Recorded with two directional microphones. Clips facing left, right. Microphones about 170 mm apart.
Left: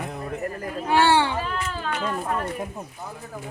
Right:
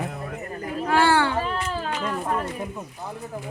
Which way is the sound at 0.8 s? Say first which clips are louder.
Left 1 dB; 15° left (ahead or behind).